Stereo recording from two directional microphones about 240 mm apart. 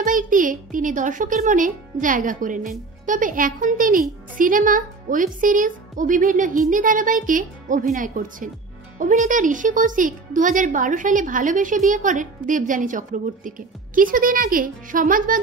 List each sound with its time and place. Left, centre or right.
0.0 s a child's voice: right